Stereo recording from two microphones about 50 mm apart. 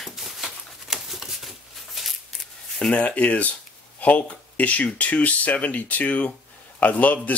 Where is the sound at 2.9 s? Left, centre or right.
Left.